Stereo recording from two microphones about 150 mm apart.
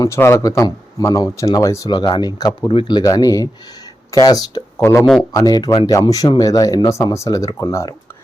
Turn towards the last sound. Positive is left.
turn(degrees=25)  # may be behind; listen again after turning